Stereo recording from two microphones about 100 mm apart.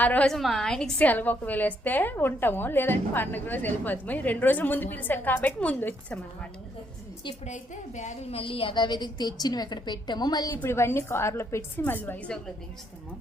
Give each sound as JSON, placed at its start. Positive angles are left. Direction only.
{"t": 0.0, "sound": "a woman's voice", "side_deg": 15}
{"t": 0.3, "sound": "a woman's voice", "side_deg": 0}
{"t": 8.3, "sound": "a woman's voice", "side_deg": 65}
{"t": 10.6, "sound": "a woman's voice", "side_deg": 25}